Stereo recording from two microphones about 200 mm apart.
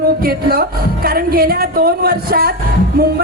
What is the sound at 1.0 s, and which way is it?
Speech, 50° right (ahead or behind).